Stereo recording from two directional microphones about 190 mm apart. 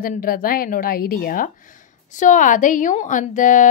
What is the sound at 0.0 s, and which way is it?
A woman's voice, 50° left (ahead or behind).